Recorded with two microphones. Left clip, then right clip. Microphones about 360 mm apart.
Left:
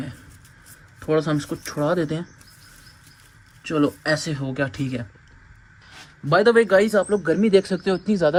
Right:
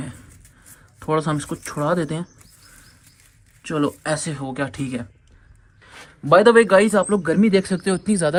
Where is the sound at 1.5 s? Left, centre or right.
Right.